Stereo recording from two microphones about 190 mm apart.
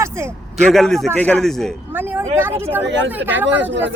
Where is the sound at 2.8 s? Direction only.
70° right (ahead or behind).